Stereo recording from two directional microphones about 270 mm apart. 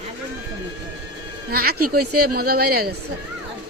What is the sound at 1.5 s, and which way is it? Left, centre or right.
Speech, right.